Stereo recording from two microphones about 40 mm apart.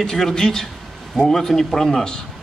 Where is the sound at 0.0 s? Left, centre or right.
Centre.